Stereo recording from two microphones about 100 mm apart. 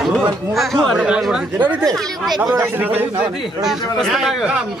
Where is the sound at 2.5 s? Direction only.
20° right (ahead or behind).